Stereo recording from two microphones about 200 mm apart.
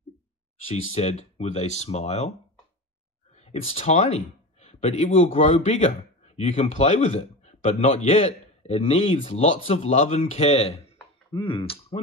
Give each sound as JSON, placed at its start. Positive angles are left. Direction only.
{"t": 0.9, "sound": "a man's voice", "side_deg": 35}
{"t": 3.3, "sound": "a man's voice", "side_deg": 30}